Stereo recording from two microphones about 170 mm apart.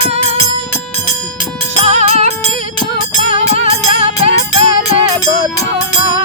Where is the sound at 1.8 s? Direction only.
40° right (ahead or behind).